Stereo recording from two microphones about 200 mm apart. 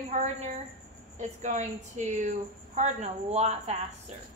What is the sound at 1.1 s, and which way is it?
Speech, 35° right (ahead or behind).